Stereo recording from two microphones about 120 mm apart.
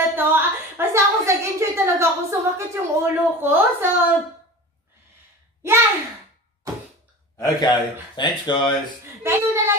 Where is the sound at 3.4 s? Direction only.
15° right (ahead or behind).